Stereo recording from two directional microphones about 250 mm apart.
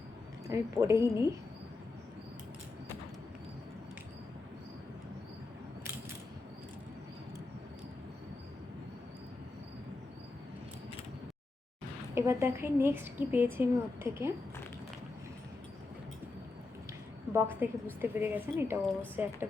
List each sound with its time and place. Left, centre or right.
0.4 s a woman's voice: centre
12.1 s a woman's voice: centre
17.3 s a woman's voice: centre